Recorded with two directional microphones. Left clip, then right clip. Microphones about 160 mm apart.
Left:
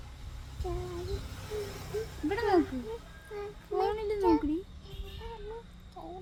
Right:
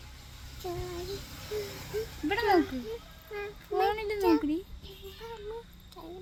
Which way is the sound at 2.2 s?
20° right (ahead or behind).